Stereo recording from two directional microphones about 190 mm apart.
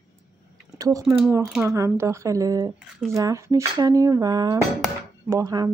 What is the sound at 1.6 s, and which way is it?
Speech, 15° right (ahead or behind).